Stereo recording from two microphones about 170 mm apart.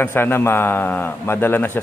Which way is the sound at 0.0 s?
10° left (ahead or behind).